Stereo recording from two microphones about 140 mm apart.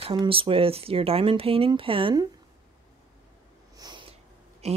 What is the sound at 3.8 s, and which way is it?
Snort, 35° right (ahead or behind).